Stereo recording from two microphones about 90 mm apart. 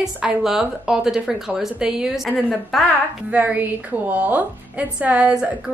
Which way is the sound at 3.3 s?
20° right (ahead or behind).